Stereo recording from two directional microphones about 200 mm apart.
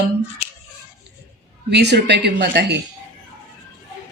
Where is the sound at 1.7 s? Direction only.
55° right (ahead or behind).